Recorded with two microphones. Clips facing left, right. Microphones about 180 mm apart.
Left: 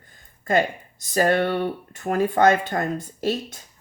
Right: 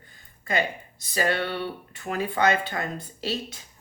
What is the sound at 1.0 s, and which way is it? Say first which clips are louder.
Speech: left 6 dB; 45° left (ahead or behind).